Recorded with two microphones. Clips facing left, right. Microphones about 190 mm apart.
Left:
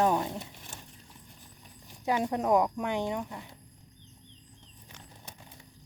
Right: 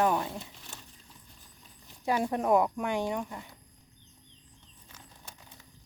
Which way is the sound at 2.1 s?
15° left (ahead or behind).